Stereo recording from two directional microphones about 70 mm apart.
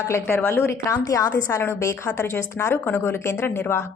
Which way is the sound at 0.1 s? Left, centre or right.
Left.